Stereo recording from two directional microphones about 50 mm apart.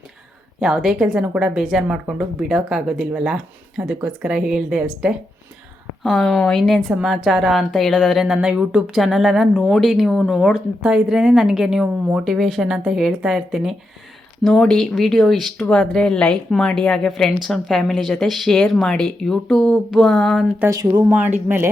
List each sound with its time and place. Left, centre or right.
0.6 s speech: centre
6.0 s speech: centre
9.0 s speech: centre
9.6 s speech: centre
10.5 s speech: centre
14.6 s speech: centre
20.7 s speech: right
21.2 s speech: right